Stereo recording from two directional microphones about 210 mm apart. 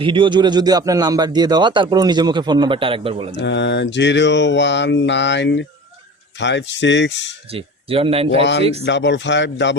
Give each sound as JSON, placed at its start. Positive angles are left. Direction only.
{"t": 0.0, "sound": "speech", "side_deg": -25}
{"t": 3.3, "sound": "mantra", "side_deg": 55}
{"t": 7.5, "sound": "speech", "side_deg": -25}
{"t": 8.8, "sound": "mantra", "side_deg": 55}